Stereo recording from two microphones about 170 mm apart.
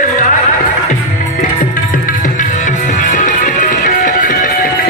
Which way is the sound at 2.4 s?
45° left (ahead or behind).